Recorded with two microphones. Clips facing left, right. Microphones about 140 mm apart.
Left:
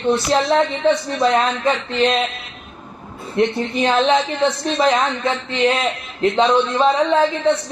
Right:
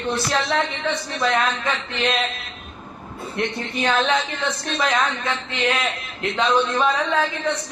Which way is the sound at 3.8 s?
25° left (ahead or behind).